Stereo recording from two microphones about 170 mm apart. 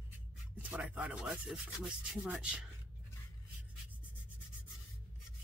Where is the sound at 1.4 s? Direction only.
5° right (ahead or behind).